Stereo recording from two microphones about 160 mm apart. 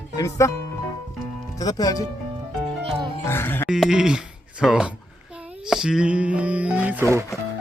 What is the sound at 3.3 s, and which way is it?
Speech, 15° left (ahead or behind).